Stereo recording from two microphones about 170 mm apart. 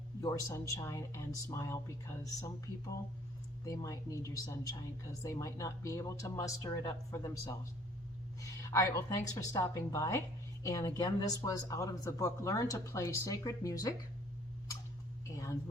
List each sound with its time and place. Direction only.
0.2 s speech: 20° left (ahead or behind)
3.6 s a woman's voice: 20° left (ahead or behind)